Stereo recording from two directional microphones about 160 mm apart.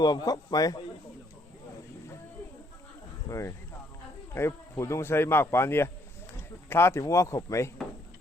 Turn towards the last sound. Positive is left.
turn(degrees=15)  # may be behind; listen again after turning